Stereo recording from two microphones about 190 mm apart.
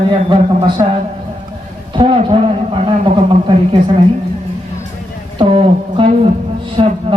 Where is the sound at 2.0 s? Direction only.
25° right (ahead or behind).